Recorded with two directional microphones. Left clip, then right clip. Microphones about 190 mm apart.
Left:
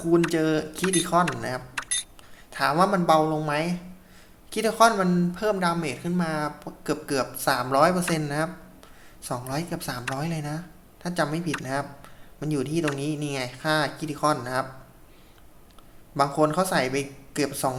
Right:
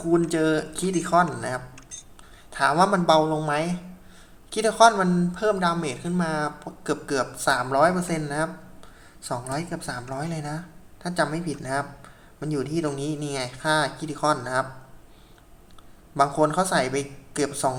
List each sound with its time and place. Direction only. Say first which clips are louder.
0.1 s speech: even; 5° left (ahead or behind)
1.7 s a sound: left 13 dB; 45° left (ahead or behind)
2.5 s speech: right 2 dB; 5° left (ahead or behind)
16.1 s speech: right 1 dB; 5° left (ahead or behind)